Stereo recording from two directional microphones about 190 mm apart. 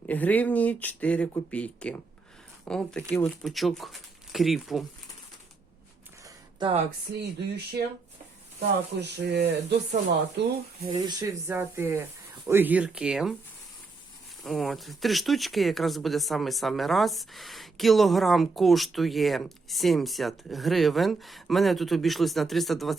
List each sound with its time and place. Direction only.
0.1 s speech: 10° left (ahead or behind)
6.2 s a sound: 25° right (ahead or behind)
7.2 s speech: 60° right (ahead or behind)
9.0 s speech: 60° right (ahead or behind)
10.8 s speech: 20° right (ahead or behind); by 13.3 s 5° right (ahead or behind)
14.4 s speech: centre (ahead or behind)